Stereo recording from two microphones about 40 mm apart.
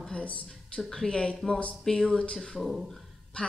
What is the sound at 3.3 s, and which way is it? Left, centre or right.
Speech, left.